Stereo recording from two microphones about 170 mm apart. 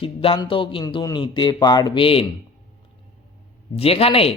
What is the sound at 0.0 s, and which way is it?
Speech, 30° left (ahead or behind).